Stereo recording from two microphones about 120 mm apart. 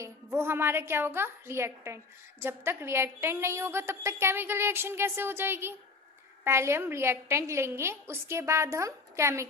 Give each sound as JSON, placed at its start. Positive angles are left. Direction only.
{"t": 0.0, "sound": "a woman's voice", "side_deg": -20}